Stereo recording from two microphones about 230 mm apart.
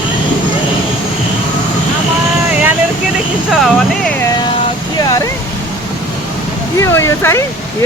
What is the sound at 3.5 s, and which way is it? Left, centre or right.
Speech, centre.